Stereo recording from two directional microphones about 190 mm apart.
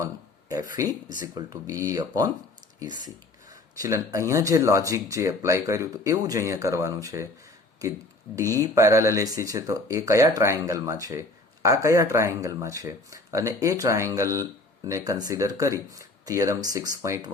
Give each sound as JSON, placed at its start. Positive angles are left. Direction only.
{"t": 0.0, "sound": "a sound", "side_deg": -20}
{"t": 1.4, "sound": "speech", "side_deg": -20}
{"t": 3.8, "sound": "speech", "side_deg": -15}
{"t": 8.4, "sound": "speech", "side_deg": -15}